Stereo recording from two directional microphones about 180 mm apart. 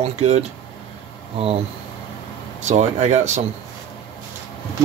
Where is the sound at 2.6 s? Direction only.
40° right (ahead or behind).